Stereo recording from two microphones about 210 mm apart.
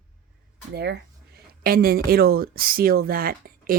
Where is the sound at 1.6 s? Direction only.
45° right (ahead or behind).